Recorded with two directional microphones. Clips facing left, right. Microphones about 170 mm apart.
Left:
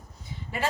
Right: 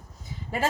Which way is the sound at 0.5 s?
40° right (ahead or behind).